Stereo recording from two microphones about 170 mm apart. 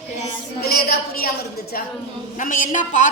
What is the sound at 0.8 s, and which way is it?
A woman's voice, 60° left (ahead or behind).